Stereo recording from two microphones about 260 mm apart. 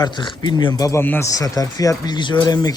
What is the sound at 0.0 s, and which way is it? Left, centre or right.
Speech, centre.